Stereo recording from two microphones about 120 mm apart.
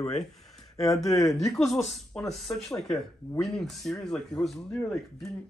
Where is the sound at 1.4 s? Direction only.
Centre (ahead or behind).